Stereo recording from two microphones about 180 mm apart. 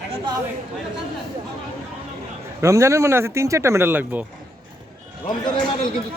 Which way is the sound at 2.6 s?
15° right (ahead or behind).